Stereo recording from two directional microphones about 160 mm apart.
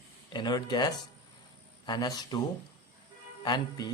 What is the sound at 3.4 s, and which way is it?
Speech, 25° left (ahead or behind).